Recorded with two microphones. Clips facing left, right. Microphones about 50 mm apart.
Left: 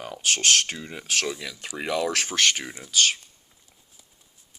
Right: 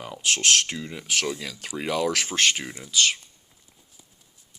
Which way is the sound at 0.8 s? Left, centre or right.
Left.